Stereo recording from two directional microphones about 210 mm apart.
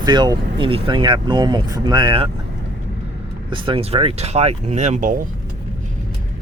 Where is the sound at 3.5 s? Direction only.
25° right (ahead or behind); by 5.3 s 40° right (ahead or behind).